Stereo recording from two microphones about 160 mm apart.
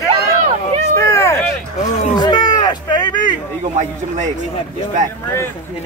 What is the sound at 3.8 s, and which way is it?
Speech, 50° right (ahead or behind).